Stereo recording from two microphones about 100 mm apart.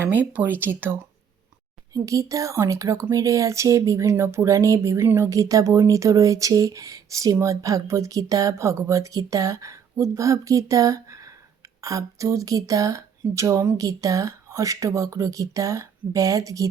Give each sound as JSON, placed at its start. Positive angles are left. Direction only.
{"t": 0.0, "sound": "speech", "side_deg": -20}
{"t": 1.9, "sound": "speech", "side_deg": -35}